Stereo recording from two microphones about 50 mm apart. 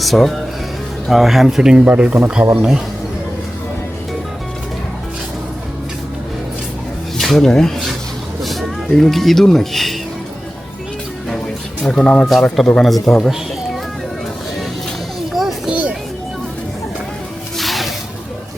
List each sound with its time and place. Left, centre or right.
0.0 s speech: centre
1.6 s speech: centre
2.4 s speech: right
7.2 s speech: centre
11.8 s speech: centre
12.8 s speech: centre
15.3 s children playing: centre
15.7 s music: right
17.6 s music: centre